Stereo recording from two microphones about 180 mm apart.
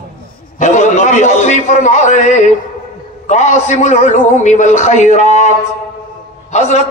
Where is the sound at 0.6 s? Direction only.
40° left (ahead or behind).